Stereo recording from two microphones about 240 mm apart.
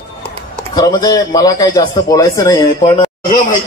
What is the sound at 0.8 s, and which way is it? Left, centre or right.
A man's voice, centre.